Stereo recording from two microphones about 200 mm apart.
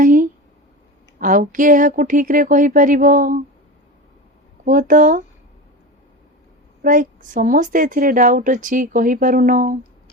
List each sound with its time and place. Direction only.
0.0 s a sound: 40° right (ahead or behind)
1.2 s a woman's voice: 40° right (ahead or behind)
4.6 s a woman's voice: 40° right (ahead or behind)
6.8 s a woman's voice: 40° right (ahead or behind)